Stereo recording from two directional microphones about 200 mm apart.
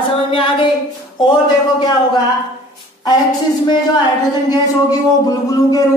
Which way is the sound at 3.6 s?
20° left (ahead or behind).